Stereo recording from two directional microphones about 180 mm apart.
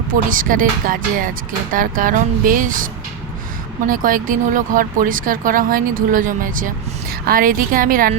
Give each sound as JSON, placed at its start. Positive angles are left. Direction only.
{"t": 0.1, "sound": "speech", "side_deg": -50}